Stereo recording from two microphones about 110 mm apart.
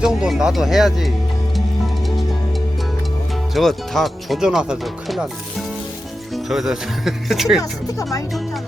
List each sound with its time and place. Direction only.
0.0 s speech: 5° right (ahead or behind)
3.5 s speech: 5° left (ahead or behind)
7.6 s speech: 30° left (ahead or behind)